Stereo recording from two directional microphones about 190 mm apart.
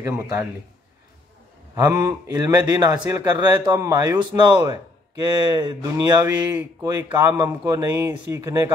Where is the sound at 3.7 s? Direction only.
15° right (ahead or behind).